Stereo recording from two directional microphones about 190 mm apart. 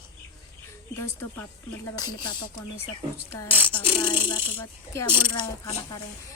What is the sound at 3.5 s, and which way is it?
Speech, 25° left (ahead or behind).